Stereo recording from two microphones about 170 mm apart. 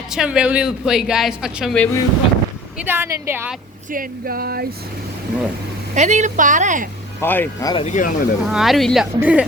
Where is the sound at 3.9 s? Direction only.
55° right (ahead or behind).